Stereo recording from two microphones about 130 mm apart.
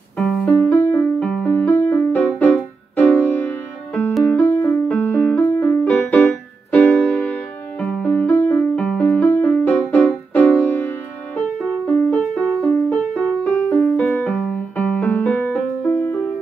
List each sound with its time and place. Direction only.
0.2 s music: 10° left (ahead or behind)